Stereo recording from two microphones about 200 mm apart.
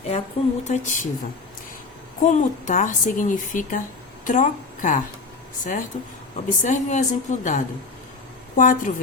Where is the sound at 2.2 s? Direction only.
40° left (ahead or behind).